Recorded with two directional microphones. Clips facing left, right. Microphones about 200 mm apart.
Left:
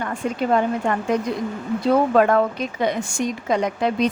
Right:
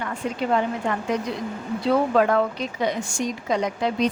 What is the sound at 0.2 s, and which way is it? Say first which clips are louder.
Speech: left 3 dB; 50° left (ahead or behind).